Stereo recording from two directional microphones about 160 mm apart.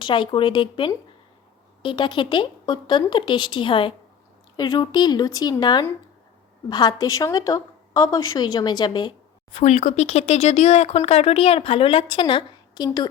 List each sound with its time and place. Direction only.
0.0 s a woman's voice: 30° left (ahead or behind)
9.6 s speech: 45° left (ahead or behind); by 13.1 s 25° left (ahead or behind)